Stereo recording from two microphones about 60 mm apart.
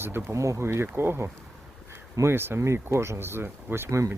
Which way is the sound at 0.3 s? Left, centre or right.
Right.